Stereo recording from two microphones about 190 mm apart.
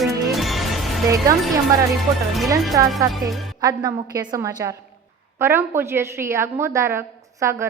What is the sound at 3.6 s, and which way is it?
A woman's voice, 20° right (ahead or behind).